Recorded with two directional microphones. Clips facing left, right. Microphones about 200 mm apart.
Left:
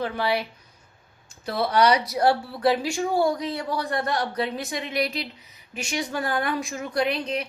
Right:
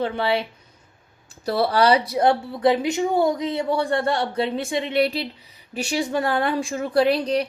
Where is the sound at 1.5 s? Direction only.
35° right (ahead or behind).